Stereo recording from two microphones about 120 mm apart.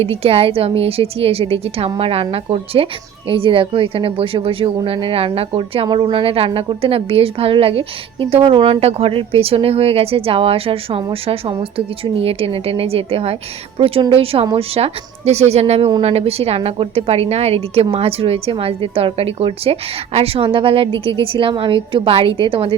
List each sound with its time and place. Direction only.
0.1 s a woman's voice: 55° right (ahead or behind)